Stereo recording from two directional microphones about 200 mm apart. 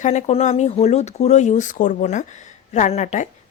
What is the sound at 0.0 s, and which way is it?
Speech, 35° left (ahead or behind).